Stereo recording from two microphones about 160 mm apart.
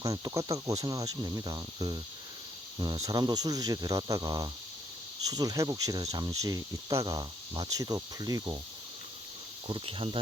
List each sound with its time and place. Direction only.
0.0 s speech: 20° right (ahead or behind)
9.6 s speech: 35° right (ahead or behind)